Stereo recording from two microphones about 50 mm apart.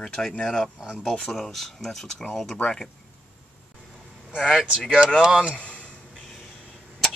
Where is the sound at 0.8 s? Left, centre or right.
Centre.